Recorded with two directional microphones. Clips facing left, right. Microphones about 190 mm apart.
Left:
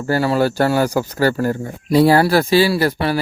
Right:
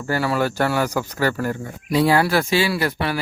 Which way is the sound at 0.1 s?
30° left (ahead or behind).